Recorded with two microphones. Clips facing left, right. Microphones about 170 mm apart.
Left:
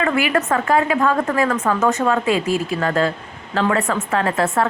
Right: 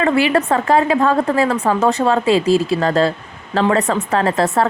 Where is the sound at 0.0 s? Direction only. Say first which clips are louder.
Right 4 dB; 30° right (ahead or behind).